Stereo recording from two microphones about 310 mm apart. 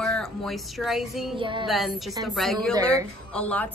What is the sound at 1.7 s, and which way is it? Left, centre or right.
A woman's voice, centre.